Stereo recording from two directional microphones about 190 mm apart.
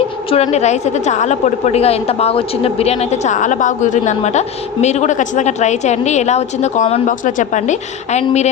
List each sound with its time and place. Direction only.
0.3 s a woman's voice: 35° left (ahead or behind)